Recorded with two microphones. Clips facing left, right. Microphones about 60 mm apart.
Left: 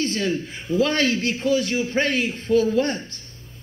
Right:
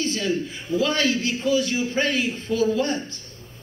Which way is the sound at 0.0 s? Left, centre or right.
Left.